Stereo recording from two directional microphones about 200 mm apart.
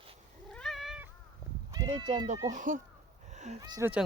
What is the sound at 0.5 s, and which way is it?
Cat, centre (ahead or behind).